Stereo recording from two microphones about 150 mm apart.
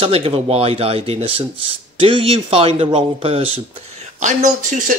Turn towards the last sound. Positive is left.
turn(degrees=-55)  # may be behind; listen again after turning